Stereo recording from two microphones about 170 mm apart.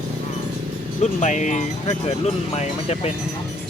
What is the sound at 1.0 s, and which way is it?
Speech, 45° left (ahead or behind).